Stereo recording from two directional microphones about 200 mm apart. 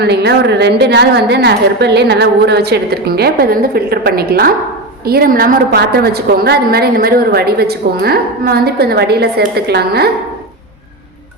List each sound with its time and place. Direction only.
0.0 s a woman's voice: 55° right (ahead or behind)